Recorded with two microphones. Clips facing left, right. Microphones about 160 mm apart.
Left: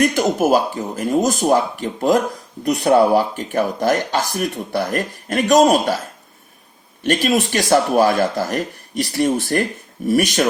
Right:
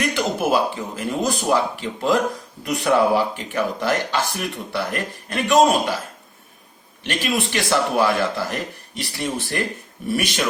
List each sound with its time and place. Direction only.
0.0 s speech: 45° left (ahead or behind)
7.0 s speech: 45° left (ahead or behind)